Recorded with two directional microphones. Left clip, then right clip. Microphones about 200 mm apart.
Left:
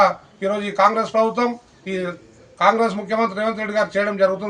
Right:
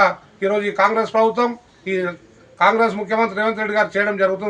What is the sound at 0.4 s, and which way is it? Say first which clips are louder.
A man's voice: even; 5° left (ahead or behind).